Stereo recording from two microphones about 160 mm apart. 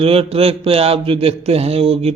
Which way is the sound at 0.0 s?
35° right (ahead or behind).